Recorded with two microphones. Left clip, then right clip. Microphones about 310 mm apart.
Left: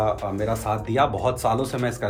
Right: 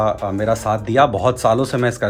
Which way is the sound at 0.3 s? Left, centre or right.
Right.